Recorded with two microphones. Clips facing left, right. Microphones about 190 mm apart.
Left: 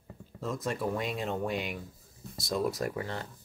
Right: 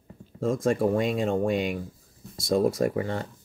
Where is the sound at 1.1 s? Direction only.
90° right.